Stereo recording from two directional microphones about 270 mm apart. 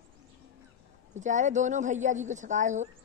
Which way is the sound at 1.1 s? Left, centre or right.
Right.